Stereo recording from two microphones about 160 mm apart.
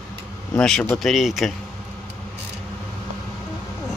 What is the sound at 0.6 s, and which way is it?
Speech, 5° left (ahead or behind).